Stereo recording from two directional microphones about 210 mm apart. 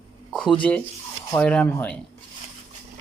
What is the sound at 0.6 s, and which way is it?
Speech, 5° left (ahead or behind).